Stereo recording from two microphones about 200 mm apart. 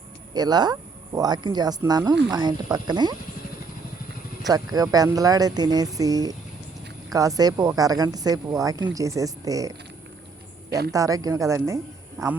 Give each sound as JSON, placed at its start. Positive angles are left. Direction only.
{"t": 0.3, "sound": "speech", "side_deg": -20}
{"t": 4.4, "sound": "a woman's voice", "side_deg": -20}
{"t": 10.7, "sound": "a woman's voice", "side_deg": -50}
{"t": 10.9, "sound": "a woman's voice", "side_deg": -15}